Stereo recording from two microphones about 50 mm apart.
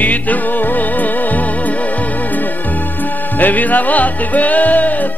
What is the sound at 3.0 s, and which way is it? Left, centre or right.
Music, left.